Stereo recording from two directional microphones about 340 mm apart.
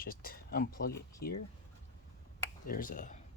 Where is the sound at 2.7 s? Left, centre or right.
Left.